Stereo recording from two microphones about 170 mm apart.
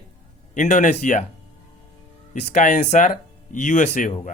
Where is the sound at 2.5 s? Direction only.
45° left (ahead or behind).